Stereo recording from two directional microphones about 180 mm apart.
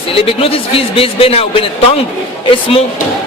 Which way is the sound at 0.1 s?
30° left (ahead or behind).